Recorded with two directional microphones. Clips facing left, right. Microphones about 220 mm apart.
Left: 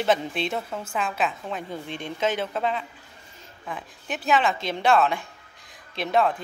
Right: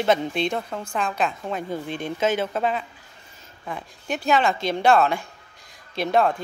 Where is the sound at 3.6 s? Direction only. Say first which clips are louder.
Right 3 dB; centre (ahead or behind).